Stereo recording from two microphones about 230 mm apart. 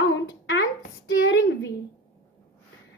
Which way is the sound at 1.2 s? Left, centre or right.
Left.